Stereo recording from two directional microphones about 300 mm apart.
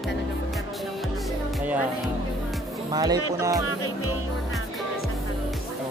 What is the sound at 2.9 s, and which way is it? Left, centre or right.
Speech, centre.